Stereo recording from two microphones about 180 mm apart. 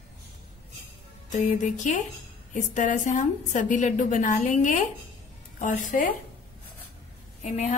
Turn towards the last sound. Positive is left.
turn(degrees=40)  # may be behind; listen again after turning